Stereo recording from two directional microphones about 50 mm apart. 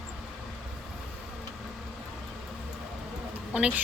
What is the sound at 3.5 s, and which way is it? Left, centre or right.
Speech, right.